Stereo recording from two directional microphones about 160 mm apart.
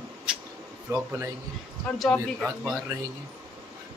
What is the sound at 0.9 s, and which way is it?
Speech, 20° right (ahead or behind).